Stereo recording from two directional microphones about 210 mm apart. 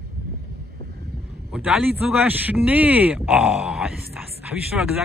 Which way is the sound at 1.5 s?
5° right (ahead or behind).